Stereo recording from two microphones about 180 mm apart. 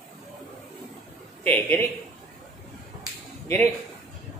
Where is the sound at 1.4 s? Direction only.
10° left (ahead or behind).